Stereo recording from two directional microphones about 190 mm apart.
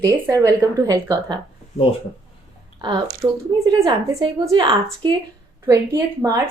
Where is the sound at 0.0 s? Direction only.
20° right (ahead or behind).